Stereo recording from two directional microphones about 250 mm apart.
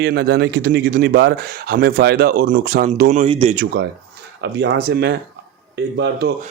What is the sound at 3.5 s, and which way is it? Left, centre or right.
Speech, right.